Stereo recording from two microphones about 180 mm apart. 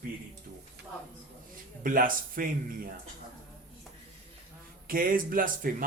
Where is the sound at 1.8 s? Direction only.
50° right (ahead or behind).